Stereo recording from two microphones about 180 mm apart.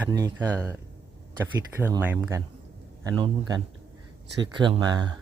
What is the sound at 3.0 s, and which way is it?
Speech, 20° right (ahead or behind).